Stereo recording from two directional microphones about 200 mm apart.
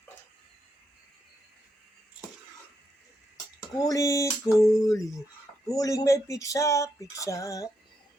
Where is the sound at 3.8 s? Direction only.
15° left (ahead or behind).